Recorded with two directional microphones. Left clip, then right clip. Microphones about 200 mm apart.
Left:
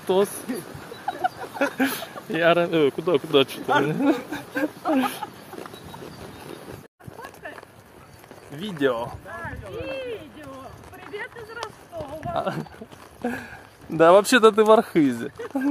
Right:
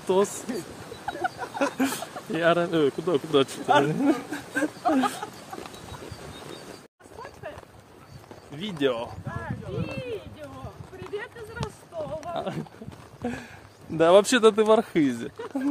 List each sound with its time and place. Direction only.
0.0 s speech: 5° right (ahead or behind)
1.1 s a sound: 10° left (ahead or behind)
1.6 s speech: 10° right (ahead or behind)
8.5 s speech: 20° left (ahead or behind)
9.8 s speech: 15° right (ahead or behind)
12.4 s speech: 15° left (ahead or behind)
13.2 s a sound: 15° left (ahead or behind)
13.9 s speech: 15° left (ahead or behind)